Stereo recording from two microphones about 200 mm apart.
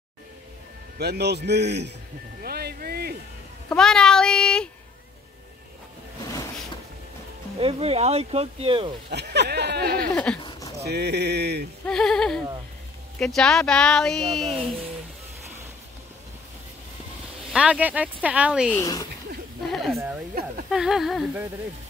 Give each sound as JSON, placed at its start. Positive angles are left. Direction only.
{"t": 0.9, "sound": "a man's voice", "side_deg": -55}
{"t": 2.4, "sound": "music", "side_deg": -50}
{"t": 3.6, "sound": "speech", "side_deg": 5}
{"t": 7.5, "sound": "speech", "side_deg": -30}
{"t": 9.1, "sound": "a man's voice", "side_deg": -55}
{"t": 10.1, "sound": "speech", "side_deg": 5}
{"t": 10.9, "sound": "a man's voice", "side_deg": -55}
{"t": 11.8, "sound": "speech", "side_deg": 5}
{"t": 17.5, "sound": "speech", "side_deg": -5}
{"t": 18.8, "sound": "speech", "side_deg": 15}
{"t": 19.7, "sound": "speech", "side_deg": 0}